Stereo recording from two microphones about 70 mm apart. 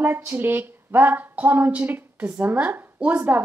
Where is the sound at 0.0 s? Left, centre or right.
Right.